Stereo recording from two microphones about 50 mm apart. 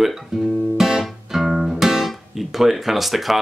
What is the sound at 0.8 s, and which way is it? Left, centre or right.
Guitar, centre.